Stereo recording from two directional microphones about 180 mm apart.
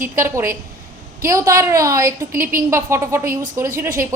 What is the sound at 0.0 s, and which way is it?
A woman's voice, 15° right (ahead or behind).